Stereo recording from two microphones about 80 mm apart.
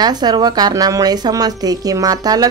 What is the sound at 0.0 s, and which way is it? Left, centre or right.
A woman's voice, right.